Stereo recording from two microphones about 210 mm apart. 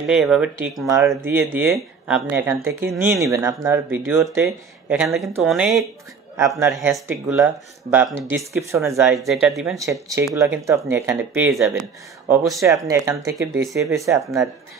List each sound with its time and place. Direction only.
0.1 s speech: 5° right (ahead or behind)
0.8 s speech: 15° right (ahead or behind)
6.3 s speech: 15° right (ahead or behind)
9.0 s speech: centre (ahead or behind)
9.8 s speech: 15° right (ahead or behind)
13.7 s speech: centre (ahead or behind)
13.9 s speech: 15° right (ahead or behind)